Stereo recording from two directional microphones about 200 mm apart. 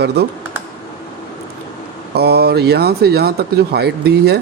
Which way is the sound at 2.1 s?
55° right (ahead or behind).